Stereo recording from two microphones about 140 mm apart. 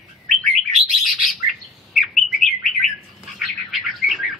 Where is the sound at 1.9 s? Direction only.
Centre (ahead or behind).